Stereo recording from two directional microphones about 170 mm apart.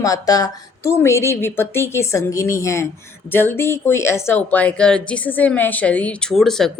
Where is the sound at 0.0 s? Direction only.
20° left (ahead or behind).